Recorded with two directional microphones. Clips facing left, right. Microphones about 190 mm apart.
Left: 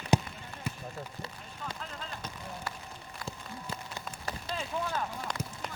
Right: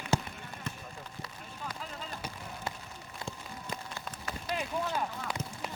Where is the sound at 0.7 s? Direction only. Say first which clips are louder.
Left 3 dB; 5° left (ahead or behind).